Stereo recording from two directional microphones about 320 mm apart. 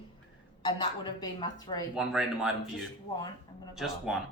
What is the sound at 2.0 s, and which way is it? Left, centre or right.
Speech, centre.